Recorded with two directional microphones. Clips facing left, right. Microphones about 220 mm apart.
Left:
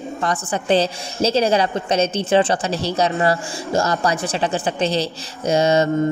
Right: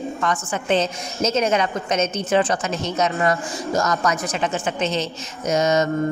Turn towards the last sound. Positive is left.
turn(degrees=30)  # may be behind; listen again after turning